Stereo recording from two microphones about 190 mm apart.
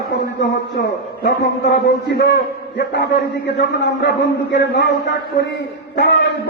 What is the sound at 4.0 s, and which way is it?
Speech, 65° left (ahead or behind).